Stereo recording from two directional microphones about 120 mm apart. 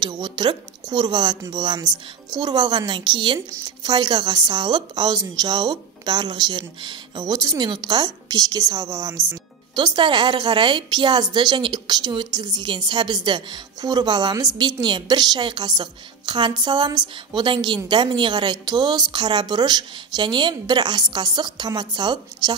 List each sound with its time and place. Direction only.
0.0 s a woman's voice: 40° right (ahead or behind)
9.8 s a woman's voice: 40° right (ahead or behind)